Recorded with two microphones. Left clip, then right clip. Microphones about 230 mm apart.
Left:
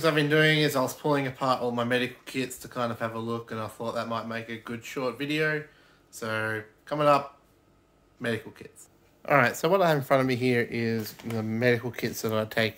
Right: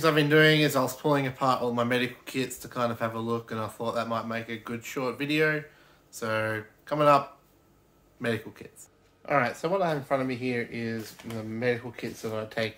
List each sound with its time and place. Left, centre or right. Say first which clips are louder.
0.0 s speech: right 2 dB; centre
9.2 s speech: left 4 dB; left